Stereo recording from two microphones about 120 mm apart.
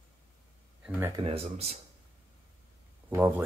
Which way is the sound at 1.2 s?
55° right (ahead or behind).